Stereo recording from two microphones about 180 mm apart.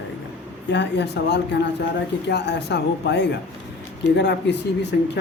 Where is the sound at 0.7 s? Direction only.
75° left (ahead or behind).